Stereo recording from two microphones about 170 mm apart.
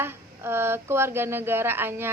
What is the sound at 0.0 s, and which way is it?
A woman's voice, 15° right (ahead or behind).